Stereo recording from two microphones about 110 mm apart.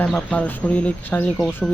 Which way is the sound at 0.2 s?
10° left (ahead or behind).